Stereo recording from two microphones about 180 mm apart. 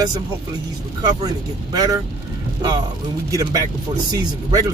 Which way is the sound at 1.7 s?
20° right (ahead or behind).